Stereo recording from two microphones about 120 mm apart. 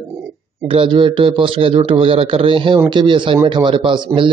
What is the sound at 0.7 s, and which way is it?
Speech, 50° right (ahead or behind).